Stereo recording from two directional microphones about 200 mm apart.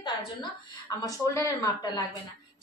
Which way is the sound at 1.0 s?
15° left (ahead or behind).